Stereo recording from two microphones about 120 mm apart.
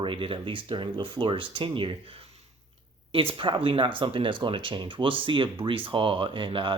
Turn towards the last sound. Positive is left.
turn(degrees=-45)  # may be behind; listen again after turning